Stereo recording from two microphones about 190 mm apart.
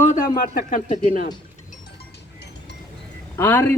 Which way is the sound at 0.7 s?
40° left (ahead or behind).